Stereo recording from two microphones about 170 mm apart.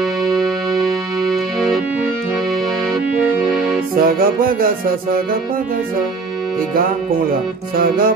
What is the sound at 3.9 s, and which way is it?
Music, 60° right (ahead or behind).